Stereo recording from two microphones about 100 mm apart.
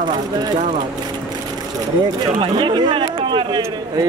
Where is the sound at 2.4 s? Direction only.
55° right (ahead or behind).